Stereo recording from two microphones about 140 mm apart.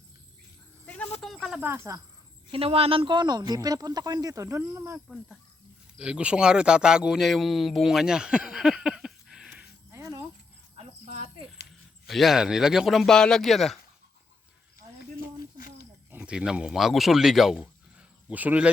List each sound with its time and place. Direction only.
0.9 s a sound: 10° left (ahead or behind)
1.2 s snake: centre (ahead or behind)
1.6 s speech: 20° right (ahead or behind)
2.5 s speech: 40° right (ahead or behind); by 5.0 s 20° right (ahead or behind)
6.0 s speech: 10° right (ahead or behind)
9.9 s a sound: 25° right (ahead or behind)
10.8 s cricket: 45° right (ahead or behind)
12.0 s speech: centre (ahead or behind)
15.4 s a sound: 90° left
16.1 s speech: 5° right (ahead or behind)